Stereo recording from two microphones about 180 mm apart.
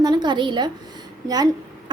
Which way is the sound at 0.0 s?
25° right (ahead or behind).